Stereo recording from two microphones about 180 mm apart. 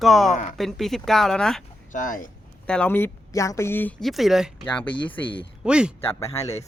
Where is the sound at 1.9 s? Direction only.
45° left (ahead or behind).